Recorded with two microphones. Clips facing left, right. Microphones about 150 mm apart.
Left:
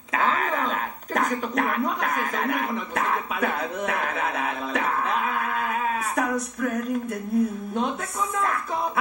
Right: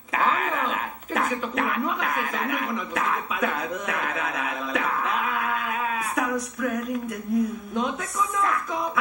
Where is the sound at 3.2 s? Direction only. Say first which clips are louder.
Even; 60° left (ahead or behind).